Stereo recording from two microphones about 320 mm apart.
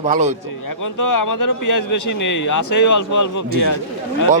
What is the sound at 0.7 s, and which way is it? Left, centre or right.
A man's voice, left.